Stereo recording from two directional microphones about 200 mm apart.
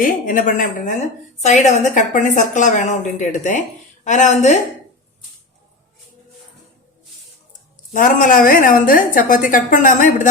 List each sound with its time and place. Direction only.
0.0 s a woman's voice: 45° left (ahead or behind)
7.9 s a woman's voice: 40° left (ahead or behind)